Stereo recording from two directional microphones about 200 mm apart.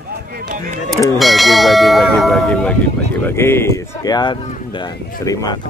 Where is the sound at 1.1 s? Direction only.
Centre (ahead or behind).